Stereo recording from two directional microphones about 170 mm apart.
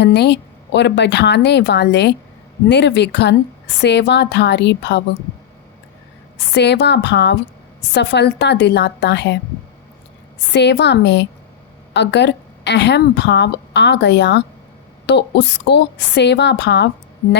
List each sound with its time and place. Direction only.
0.0 s a woman's voice: 85° left
6.5 s a woman's voice: 85° left
10.5 s a woman's voice: 90° left